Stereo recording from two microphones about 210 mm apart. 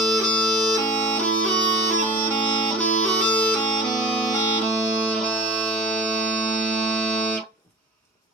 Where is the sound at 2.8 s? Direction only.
5° left (ahead or behind).